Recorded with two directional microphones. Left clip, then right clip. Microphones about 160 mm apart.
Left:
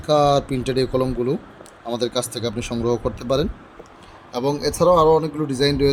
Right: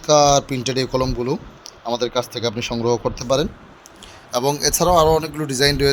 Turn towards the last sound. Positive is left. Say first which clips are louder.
# right 1 dB
turn(degrees=-5)  # may be behind; listen again after turning